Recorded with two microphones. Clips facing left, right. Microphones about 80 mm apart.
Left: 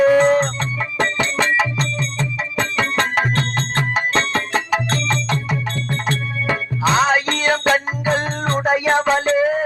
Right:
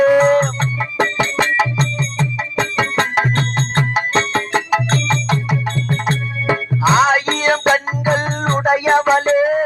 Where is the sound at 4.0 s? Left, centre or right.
Centre.